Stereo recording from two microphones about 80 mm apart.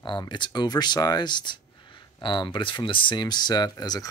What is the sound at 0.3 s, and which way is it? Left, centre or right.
Speech, left.